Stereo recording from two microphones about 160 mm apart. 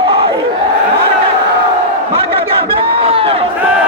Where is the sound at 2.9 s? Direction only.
35° right (ahead or behind).